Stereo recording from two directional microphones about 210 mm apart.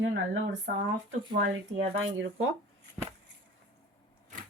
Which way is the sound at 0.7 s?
50° right (ahead or behind).